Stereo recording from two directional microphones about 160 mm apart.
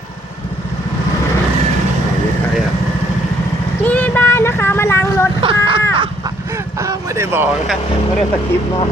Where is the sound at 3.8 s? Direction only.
10° left (ahead or behind).